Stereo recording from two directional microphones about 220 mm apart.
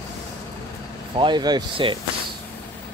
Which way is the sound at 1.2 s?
20° right (ahead or behind).